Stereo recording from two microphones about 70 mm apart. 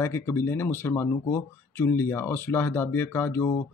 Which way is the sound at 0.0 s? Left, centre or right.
Left.